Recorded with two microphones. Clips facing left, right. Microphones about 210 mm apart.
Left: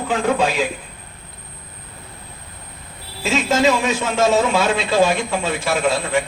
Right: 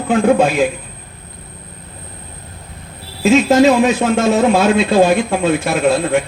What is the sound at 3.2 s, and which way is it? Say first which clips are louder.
A man's voice: right 7 dB; 55° right (ahead or behind).